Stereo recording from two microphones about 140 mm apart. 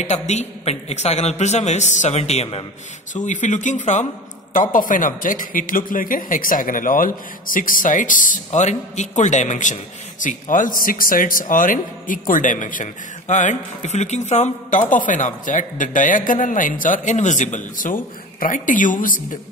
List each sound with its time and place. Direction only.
0.0 s a man's voice: 55° left (ahead or behind)
3.2 s speech: 60° left (ahead or behind)
4.6 s a man's voice: 70° left (ahead or behind)
10.2 s a man's voice: 75° left (ahead or behind)